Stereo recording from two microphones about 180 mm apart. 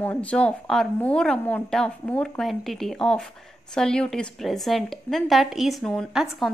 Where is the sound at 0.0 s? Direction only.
5° left (ahead or behind).